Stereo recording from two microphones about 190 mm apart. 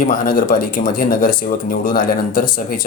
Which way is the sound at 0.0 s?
45° left (ahead or behind).